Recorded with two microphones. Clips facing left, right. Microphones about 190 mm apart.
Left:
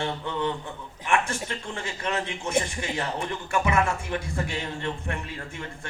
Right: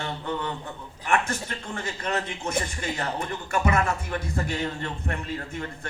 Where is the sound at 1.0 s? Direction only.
40° right (ahead or behind).